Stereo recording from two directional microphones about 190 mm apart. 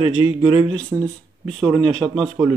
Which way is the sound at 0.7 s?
5° left (ahead or behind).